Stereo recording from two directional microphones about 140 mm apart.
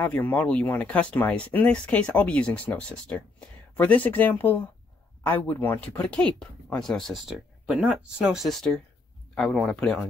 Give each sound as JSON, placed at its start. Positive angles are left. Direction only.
{"t": 0.0, "sound": "speech", "side_deg": 10}